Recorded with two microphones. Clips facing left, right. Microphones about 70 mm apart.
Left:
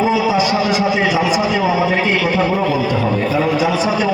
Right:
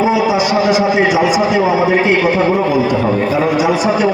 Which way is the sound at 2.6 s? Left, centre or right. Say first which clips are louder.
Right 3 dB; centre.